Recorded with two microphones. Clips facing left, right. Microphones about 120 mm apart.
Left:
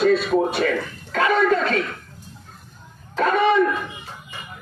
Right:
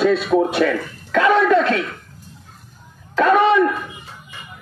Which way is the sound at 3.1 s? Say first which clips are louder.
Right 4 dB; 70° right (ahead or behind).